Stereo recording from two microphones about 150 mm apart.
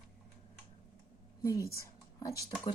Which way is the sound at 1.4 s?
20° left (ahead or behind).